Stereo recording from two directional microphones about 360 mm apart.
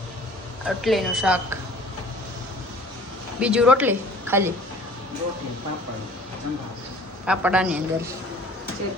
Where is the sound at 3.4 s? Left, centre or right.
Centre.